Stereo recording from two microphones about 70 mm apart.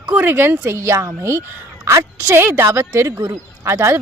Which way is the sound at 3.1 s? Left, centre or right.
Right.